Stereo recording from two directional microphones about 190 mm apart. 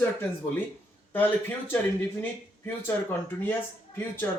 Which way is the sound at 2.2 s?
10° left (ahead or behind).